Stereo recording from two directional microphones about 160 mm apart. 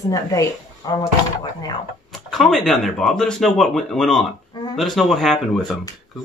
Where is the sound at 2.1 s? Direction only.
Centre (ahead or behind).